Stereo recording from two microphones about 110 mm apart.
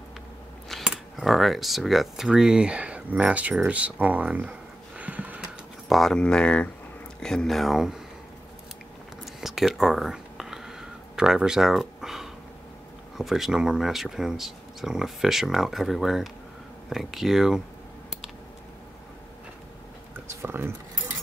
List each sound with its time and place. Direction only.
0.8 s speech: 5° right (ahead or behind)
5.9 s speech: centre (ahead or behind)
9.2 s a sound: centre (ahead or behind)
13.2 s speech: 5° right (ahead or behind)
20.2 s speech: 20° right (ahead or behind)